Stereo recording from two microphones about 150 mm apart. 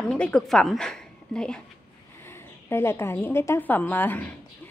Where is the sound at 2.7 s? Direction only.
15° left (ahead or behind).